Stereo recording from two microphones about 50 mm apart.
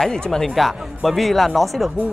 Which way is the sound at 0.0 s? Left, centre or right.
Centre.